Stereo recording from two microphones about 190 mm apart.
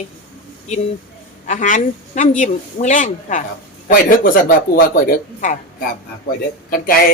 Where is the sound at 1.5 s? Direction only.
40° left (ahead or behind).